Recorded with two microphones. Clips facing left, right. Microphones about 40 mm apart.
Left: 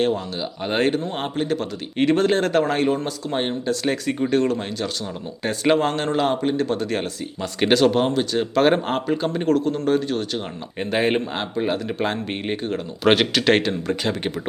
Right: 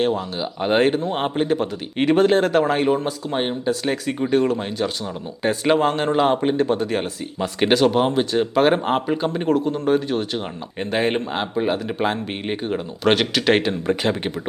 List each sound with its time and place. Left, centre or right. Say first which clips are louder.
0.0 s speech: right 1 dB; centre
8.1 s speech: right 2 dB; centre
10.8 s speech: left 1 dB; centre
13.8 s speech: right 3 dB; right